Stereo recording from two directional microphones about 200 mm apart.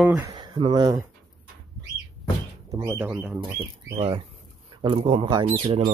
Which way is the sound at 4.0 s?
25° right (ahead or behind).